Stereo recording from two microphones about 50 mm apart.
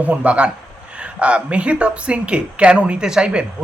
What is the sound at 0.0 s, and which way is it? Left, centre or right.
Speech, right.